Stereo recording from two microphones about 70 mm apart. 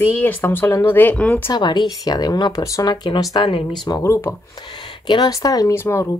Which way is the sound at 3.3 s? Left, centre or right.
Left.